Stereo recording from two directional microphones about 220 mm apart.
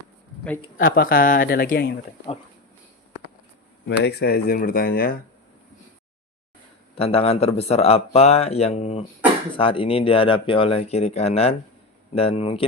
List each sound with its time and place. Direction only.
0.8 s speech: 40° left (ahead or behind)
3.8 s speech: 50° left (ahead or behind)
6.9 s speech: 25° left (ahead or behind)